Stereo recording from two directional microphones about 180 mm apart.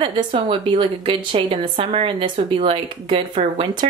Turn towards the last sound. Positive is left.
turn(degrees=-30)  # may be behind; listen again after turning